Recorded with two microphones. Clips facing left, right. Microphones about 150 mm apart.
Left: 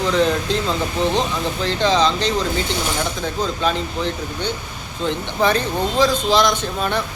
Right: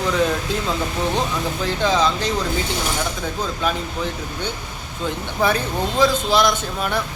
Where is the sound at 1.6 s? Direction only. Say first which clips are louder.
Left 2 dB; 5° right (ahead or behind).